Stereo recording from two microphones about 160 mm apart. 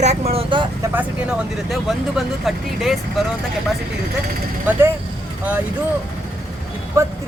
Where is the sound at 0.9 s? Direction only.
10° right (ahead or behind).